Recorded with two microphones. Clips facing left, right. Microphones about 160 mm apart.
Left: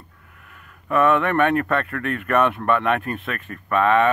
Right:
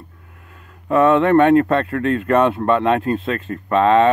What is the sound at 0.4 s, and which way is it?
Speech, 25° right (ahead or behind).